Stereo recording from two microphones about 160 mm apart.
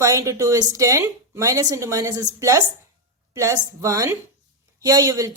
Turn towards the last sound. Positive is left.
turn(degrees=-20)  # may be behind; listen again after turning